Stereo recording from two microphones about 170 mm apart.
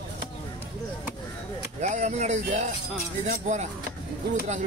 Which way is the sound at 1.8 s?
45° right (ahead or behind).